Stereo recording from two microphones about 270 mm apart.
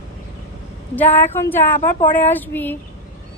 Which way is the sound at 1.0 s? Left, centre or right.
Centre.